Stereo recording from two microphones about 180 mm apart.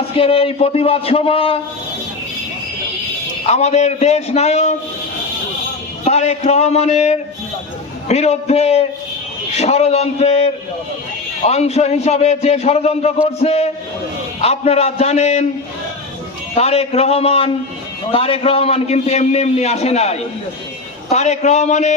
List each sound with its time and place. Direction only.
0.1 s a man's voice: 30° left (ahead or behind)
3.4 s a man's voice: 40° left (ahead or behind)
6.1 s a man's voice: 35° left (ahead or behind)
16.6 s a man's voice: 35° left (ahead or behind)